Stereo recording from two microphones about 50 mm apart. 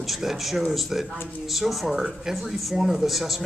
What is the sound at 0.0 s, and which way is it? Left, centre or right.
Speech, centre.